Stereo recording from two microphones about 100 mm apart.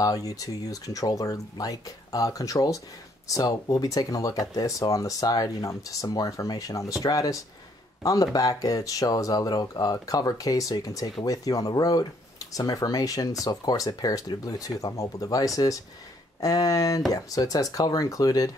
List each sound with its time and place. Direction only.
0.0 s speech: 35° left (ahead or behind)